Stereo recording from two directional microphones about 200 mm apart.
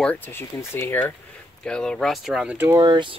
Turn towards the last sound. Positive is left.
turn(degrees=-20)  # may be behind; listen again after turning